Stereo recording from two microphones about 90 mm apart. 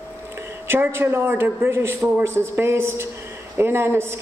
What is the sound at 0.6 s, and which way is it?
A man's voice, 25° right (ahead or behind).